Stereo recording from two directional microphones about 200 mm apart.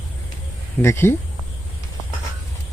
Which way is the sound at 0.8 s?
15° left (ahead or behind).